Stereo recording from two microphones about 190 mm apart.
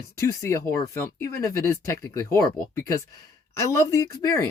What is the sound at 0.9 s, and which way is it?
Speech, 15° left (ahead or behind).